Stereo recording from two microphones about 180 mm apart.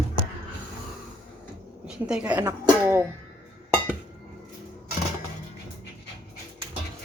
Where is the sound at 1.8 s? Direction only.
5° right (ahead or behind).